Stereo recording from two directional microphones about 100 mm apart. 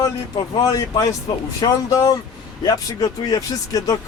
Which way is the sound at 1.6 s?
40° left (ahead or behind).